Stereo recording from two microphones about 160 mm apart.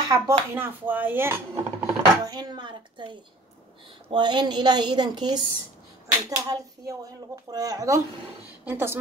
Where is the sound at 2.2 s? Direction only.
25° right (ahead or behind).